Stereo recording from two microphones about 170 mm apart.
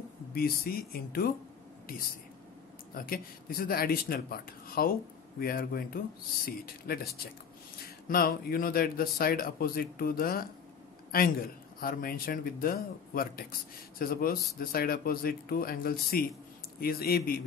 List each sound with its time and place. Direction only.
0.3 s speech: 60° left (ahead or behind)
2.9 s speech: 60° left (ahead or behind)
8.1 s a man's voice: 60° left (ahead or behind)